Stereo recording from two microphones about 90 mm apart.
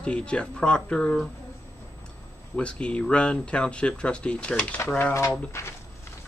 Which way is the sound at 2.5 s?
10° left (ahead or behind).